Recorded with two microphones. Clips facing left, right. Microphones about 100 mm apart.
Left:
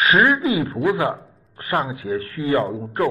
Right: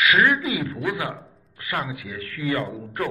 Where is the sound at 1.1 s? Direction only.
40° left (ahead or behind).